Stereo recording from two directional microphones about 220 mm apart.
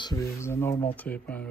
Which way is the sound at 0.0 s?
15° left (ahead or behind).